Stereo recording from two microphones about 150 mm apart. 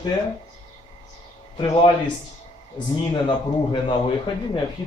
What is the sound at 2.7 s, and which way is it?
A man's voice, 30° left (ahead or behind).